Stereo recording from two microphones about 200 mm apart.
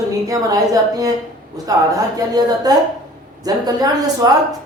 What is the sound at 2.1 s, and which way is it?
Speech, 20° right (ahead or behind).